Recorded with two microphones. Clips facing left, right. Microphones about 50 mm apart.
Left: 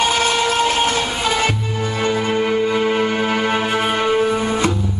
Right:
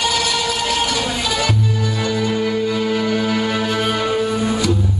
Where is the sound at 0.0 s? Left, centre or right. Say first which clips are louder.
Left 3 dB; left.